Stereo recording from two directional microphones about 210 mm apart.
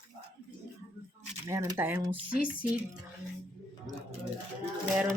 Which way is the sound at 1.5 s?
10° right (ahead or behind).